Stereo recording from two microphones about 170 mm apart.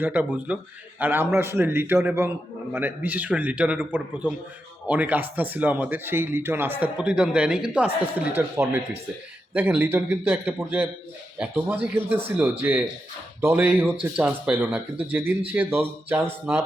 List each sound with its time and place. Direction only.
0.0 s speech: 10° right (ahead or behind)
13.4 s speech: 10° right (ahead or behind)